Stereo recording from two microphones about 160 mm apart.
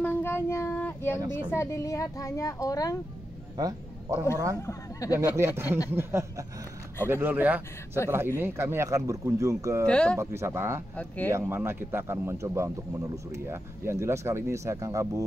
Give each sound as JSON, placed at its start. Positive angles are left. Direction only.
{"t": 0.0, "sound": "child singing", "side_deg": 15}
{"t": 1.5, "sound": "a child's voice", "side_deg": 15}
{"t": 3.5, "sound": "a man's voice", "side_deg": -20}
{"t": 4.6, "sound": "a child's voice", "side_deg": 20}
{"t": 5.1, "sound": "speech", "side_deg": -15}
{"t": 9.8, "sound": "speech", "side_deg": 5}
{"t": 10.1, "sound": "speech", "side_deg": -15}